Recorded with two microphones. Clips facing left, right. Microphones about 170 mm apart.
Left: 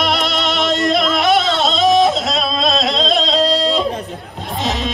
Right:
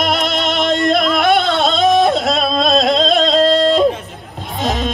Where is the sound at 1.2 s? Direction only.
55° right (ahead or behind).